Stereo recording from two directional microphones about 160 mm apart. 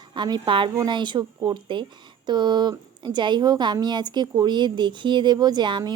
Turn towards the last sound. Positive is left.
turn(degrees=-30)  # may be behind; listen again after turning